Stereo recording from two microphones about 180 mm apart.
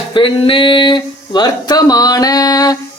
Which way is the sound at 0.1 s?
30° left (ahead or behind).